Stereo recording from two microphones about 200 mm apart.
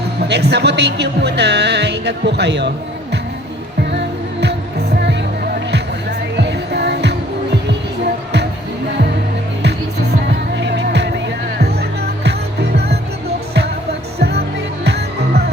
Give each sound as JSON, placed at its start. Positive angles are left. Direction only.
{"t": 0.2, "sound": "speech", "side_deg": -55}
{"t": 3.9, "sound": "music", "side_deg": -55}
{"t": 5.7, "sound": "music", "side_deg": -55}
{"t": 10.6, "sound": "music", "side_deg": -60}
{"t": 14.2, "sound": "music", "side_deg": -55}